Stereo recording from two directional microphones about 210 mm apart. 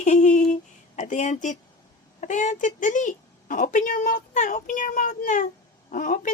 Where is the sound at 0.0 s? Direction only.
35° left (ahead or behind).